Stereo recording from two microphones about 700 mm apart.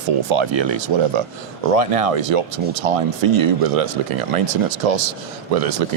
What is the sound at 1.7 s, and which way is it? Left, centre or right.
Speech, right.